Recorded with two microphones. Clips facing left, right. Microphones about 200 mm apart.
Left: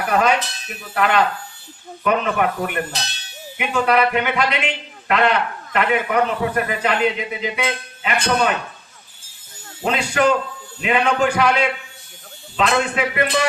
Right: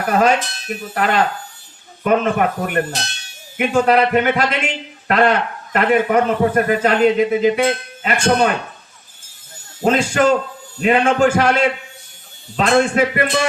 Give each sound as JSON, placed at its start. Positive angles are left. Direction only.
{"t": 0.1, "sound": "a man's voice", "side_deg": -45}
{"t": 9.8, "sound": "a man's voice", "side_deg": -45}